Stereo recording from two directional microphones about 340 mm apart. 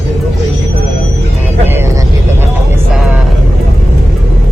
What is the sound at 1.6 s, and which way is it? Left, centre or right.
Vehicle, centre.